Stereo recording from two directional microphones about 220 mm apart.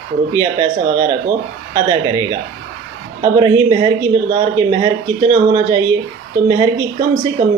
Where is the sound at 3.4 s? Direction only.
20° right (ahead or behind).